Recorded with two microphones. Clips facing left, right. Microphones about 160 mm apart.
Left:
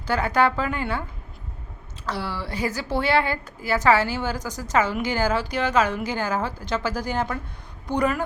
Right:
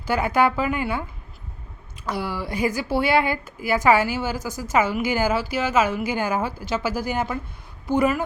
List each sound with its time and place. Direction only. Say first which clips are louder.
0.0 s a woman's voice: right 1 dB; 10° right (ahead or behind)
2.0 s a woman's voice: right 2 dB; 10° right (ahead or behind)